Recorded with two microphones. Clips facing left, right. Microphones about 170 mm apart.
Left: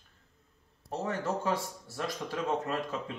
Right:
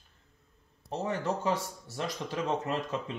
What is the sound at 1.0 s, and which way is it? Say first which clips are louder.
Speech: right 1 dB; 20° right (ahead or behind).